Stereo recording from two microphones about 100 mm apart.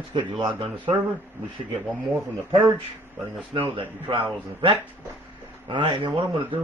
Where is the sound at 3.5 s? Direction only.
60° right (ahead or behind).